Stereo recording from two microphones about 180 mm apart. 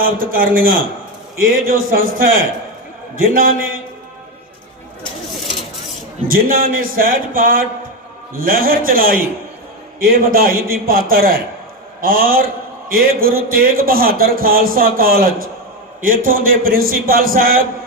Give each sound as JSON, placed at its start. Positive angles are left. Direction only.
{"t": 0.0, "sound": "a man's voice", "side_deg": -50}
{"t": 6.2, "sound": "a man's voice", "side_deg": -55}